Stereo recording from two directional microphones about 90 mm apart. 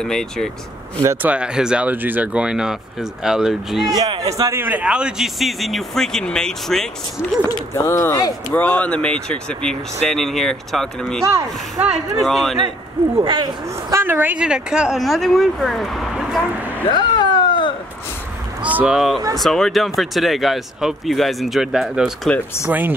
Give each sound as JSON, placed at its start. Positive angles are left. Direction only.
{"t": 0.0, "sound": "speech", "side_deg": 5}
{"t": 1.1, "sound": "speech", "side_deg": -15}
{"t": 4.2, "sound": "speech", "side_deg": -40}
{"t": 4.6, "sound": "speech", "side_deg": -20}
{"t": 7.7, "sound": "speech", "side_deg": 35}
{"t": 8.5, "sound": "speech", "side_deg": 15}
{"t": 11.2, "sound": "speech", "side_deg": -35}
{"t": 12.2, "sound": "speech", "side_deg": 0}
{"t": 13.2, "sound": "speech", "side_deg": -65}
{"t": 14.0, "sound": "speech", "side_deg": -20}
{"t": 16.8, "sound": "a sound", "side_deg": 55}
{"t": 18.6, "sound": "vehicle", "side_deg": -15}
{"t": 18.9, "sound": "speech", "side_deg": 0}
{"t": 22.7, "sound": "speech", "side_deg": -20}